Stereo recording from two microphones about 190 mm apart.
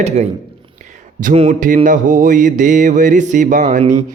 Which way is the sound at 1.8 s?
45° right (ahead or behind).